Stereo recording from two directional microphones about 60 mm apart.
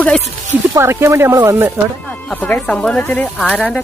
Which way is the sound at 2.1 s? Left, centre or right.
Left.